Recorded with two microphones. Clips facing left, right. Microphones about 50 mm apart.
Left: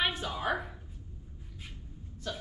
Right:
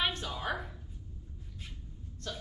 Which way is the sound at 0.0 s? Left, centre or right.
Centre.